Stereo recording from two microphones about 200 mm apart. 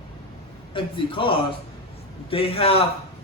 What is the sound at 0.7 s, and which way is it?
A man's voice, 25° left (ahead or behind).